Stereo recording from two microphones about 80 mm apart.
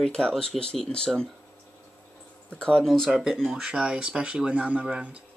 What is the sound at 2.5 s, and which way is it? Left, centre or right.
Speech, centre.